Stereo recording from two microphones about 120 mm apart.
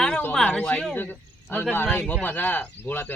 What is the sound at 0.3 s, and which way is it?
Speech, 10° left (ahead or behind).